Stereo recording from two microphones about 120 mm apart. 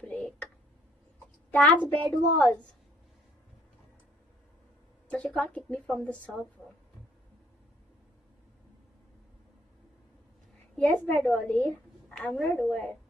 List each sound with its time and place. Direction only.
0.0 s a sound: 5° left (ahead or behind)
1.5 s a woman's voice: 10° left (ahead or behind)
5.1 s speech: 5° left (ahead or behind)
11.1 s a woman's voice: 10° left (ahead or behind)